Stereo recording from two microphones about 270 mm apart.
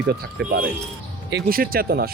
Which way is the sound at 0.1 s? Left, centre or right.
Right.